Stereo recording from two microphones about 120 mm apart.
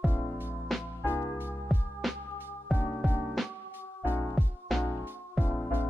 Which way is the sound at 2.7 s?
15° right (ahead or behind).